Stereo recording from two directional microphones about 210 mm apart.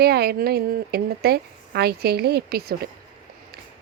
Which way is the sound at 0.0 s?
50° right (ahead or behind).